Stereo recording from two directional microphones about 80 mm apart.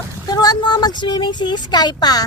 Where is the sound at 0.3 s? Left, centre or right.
Left.